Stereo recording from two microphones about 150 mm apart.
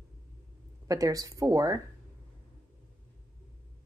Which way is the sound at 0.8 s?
20° right (ahead or behind).